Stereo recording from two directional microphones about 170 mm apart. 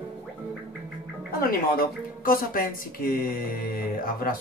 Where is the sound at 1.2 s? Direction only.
60° left (ahead or behind).